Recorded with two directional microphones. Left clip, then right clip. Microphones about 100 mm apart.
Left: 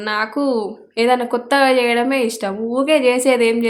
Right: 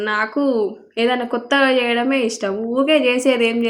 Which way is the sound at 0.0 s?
15° left (ahead or behind).